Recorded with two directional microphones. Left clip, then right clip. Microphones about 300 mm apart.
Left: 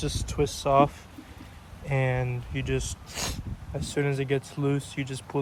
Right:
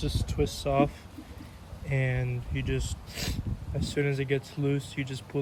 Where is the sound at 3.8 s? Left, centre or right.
Centre.